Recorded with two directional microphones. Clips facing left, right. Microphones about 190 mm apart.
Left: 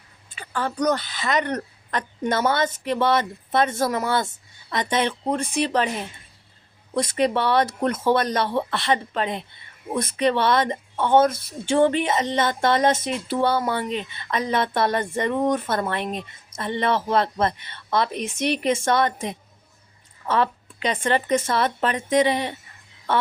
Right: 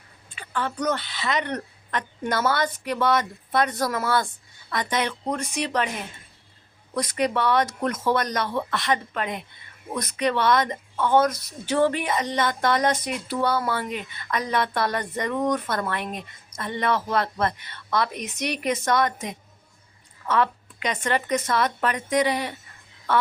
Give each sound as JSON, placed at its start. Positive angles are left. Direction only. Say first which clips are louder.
{"t": 0.3, "sound": "a woman's voice", "louder": "left 3 dB", "side_deg": 40}
{"t": 2.2, "sound": "speech", "louder": "left 2 dB", "side_deg": 20}
{"t": 6.9, "sound": "a woman's voice", "louder": "left 3 dB", "side_deg": 25}